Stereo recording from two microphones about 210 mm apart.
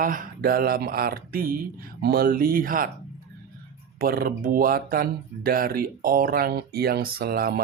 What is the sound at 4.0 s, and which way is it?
Speech, 45° right (ahead or behind).